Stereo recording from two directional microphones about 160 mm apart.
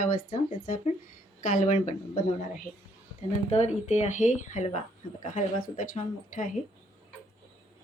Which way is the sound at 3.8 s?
45° left (ahead or behind).